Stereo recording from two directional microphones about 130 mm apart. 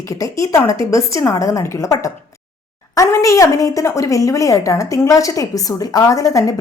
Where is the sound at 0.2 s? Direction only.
25° left (ahead or behind).